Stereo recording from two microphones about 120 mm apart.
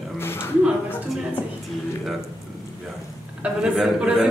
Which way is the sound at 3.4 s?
5° right (ahead or behind).